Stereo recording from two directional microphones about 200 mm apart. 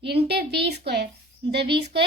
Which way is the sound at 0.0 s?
55° right (ahead or behind).